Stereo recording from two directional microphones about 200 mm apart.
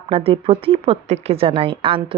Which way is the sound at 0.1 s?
30° right (ahead or behind).